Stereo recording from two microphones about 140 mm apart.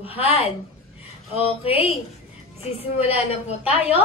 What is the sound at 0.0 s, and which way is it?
A woman's voice, 45° left (ahead or behind).